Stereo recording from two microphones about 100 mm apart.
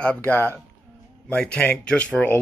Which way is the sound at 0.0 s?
15° left (ahead or behind).